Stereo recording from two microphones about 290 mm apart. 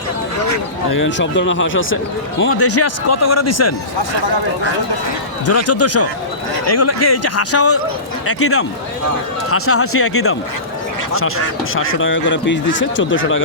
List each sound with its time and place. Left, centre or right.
0.9 s speech: left
5.5 s speech: left
11.7 s speech: left